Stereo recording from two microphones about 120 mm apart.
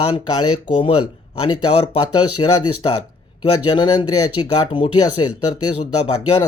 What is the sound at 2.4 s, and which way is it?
Speech, 45° left (ahead or behind).